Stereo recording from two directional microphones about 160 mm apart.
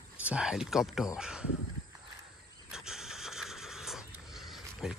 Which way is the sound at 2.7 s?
5° right (ahead or behind).